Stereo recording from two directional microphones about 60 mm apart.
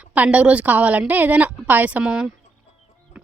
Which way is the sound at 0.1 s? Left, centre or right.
Right.